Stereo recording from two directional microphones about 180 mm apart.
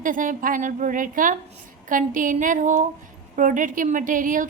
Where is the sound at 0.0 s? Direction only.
45° right (ahead or behind).